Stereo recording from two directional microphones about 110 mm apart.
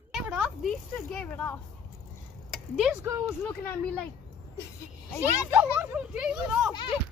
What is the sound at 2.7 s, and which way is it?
Speech, 5° right (ahead or behind).